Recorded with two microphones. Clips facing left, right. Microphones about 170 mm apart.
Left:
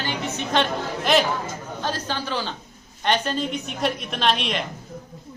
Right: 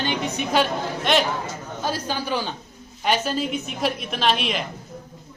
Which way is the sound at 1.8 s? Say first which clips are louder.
Right 2 dB; 10° right (ahead or behind).